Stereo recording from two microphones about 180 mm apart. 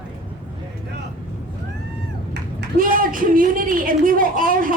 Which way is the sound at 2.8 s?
50° right (ahead or behind).